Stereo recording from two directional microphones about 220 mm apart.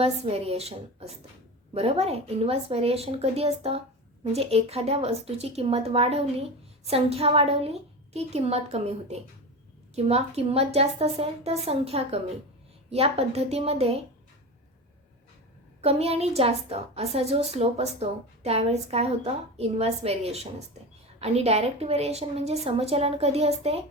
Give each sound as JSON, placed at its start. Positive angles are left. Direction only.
{"t": 0.0, "sound": "a woman's voice", "side_deg": -25}
{"t": 15.8, "sound": "a woman's voice", "side_deg": -30}